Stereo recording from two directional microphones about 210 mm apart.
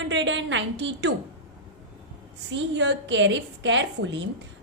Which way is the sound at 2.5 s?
60° right (ahead or behind).